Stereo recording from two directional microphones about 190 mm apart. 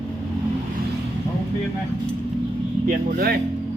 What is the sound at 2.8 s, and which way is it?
Speech, 50° right (ahead or behind).